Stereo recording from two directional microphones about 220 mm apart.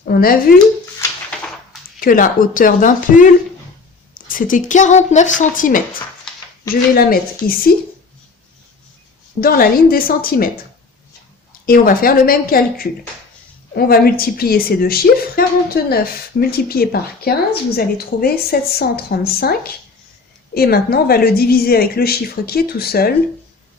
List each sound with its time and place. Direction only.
0.1 s speech: 40° left (ahead or behind)
2.0 s speech: 40° left (ahead or behind)
4.3 s speech: 40° left (ahead or behind)
9.4 s a woman's voice: 40° left (ahead or behind)
11.6 s a woman's voice: 40° left (ahead or behind)